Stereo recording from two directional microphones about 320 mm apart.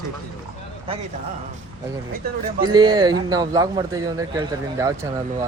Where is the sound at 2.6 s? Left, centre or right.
Centre.